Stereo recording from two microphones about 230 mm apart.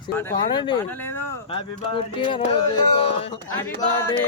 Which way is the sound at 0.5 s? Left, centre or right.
Centre.